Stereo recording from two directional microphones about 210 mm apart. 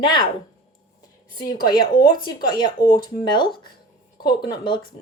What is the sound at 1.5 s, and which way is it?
Speech, 20° left (ahead or behind).